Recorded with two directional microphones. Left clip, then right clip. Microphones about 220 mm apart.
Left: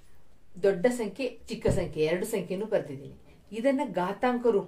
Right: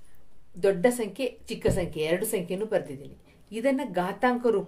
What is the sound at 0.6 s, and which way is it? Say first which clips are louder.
Speech: right 2 dB; 35° right (ahead or behind).